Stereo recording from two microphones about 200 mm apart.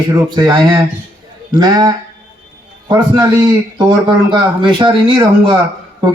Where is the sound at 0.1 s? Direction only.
20° right (ahead or behind).